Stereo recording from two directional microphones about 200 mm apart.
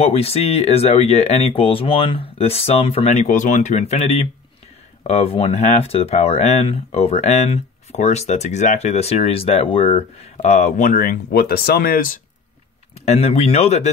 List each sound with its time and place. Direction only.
0.0 s speech: 30° left (ahead or behind)
13.0 s speech: 35° left (ahead or behind)